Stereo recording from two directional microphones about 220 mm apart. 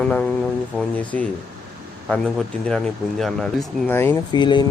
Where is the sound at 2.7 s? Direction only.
Centre (ahead or behind).